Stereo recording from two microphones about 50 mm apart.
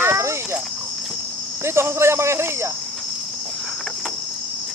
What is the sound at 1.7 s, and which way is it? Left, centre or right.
Cricket, right.